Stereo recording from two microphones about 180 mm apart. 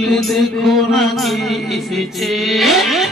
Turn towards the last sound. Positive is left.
turn(degrees=0)  # may be behind; listen again after turning